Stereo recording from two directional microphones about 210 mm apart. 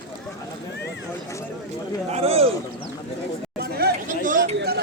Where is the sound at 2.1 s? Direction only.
30° right (ahead or behind).